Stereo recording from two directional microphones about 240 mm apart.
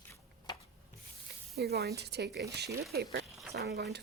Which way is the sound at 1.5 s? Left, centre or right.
Right.